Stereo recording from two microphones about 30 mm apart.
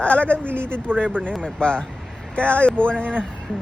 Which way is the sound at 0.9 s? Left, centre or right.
Left.